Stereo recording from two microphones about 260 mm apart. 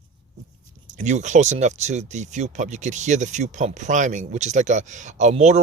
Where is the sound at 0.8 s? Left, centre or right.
Right.